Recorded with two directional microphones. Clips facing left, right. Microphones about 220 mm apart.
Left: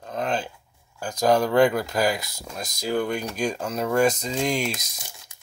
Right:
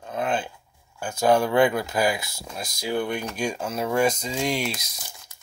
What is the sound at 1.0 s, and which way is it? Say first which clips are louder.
Speech: even; 40° left (ahead or behind).